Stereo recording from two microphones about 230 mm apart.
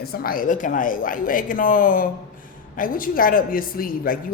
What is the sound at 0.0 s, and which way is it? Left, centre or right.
A woman's voice, left.